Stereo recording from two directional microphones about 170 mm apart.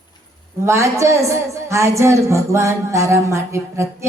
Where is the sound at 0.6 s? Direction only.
15° right (ahead or behind).